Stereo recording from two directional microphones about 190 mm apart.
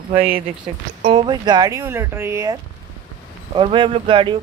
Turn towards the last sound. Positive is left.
turn(degrees=-25)  # may be behind; listen again after turning